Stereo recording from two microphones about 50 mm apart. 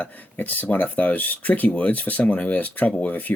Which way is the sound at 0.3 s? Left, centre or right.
Left.